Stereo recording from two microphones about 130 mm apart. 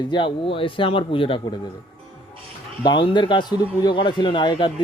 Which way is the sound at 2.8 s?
35° left (ahead or behind).